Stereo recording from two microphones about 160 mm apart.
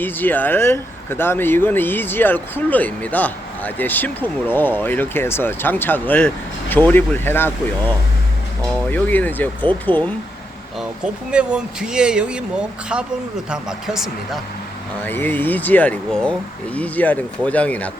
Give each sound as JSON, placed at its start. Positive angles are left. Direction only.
{"t": 0.0, "sound": "speech", "side_deg": 10}
{"t": 10.8, "sound": "speech", "side_deg": -5}
{"t": 15.0, "sound": "speech", "side_deg": 10}